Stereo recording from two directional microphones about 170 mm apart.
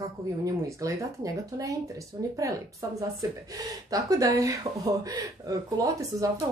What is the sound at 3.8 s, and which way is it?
Speech, 20° right (ahead or behind).